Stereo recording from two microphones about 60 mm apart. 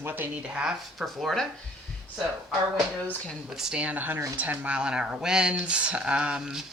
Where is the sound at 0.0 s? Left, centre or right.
Right.